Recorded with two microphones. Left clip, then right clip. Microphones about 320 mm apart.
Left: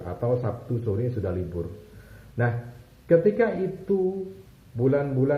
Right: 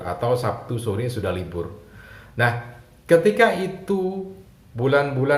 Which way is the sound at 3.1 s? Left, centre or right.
Right.